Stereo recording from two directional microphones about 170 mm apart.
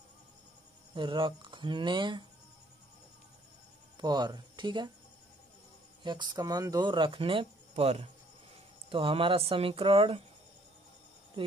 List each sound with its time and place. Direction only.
0.9 s speech: 30° right (ahead or behind)
4.0 s speech: 25° right (ahead or behind)
6.0 s speech: 25° right (ahead or behind)